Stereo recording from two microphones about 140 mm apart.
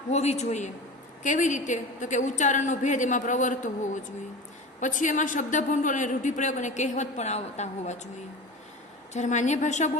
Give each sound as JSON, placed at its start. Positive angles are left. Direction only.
{"t": 0.1, "sound": "a woman's voice", "side_deg": 50}
{"t": 9.1, "sound": "speech", "side_deg": 60}